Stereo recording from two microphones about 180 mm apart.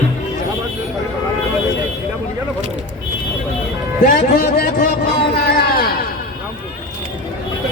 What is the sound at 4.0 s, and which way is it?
Speech, 55° left (ahead or behind).